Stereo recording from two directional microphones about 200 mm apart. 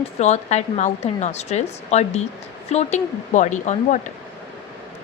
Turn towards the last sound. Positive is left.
turn(degrees=35)  # may be behind; listen again after turning